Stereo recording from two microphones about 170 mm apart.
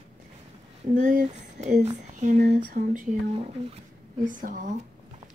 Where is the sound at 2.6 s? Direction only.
50° right (ahead or behind).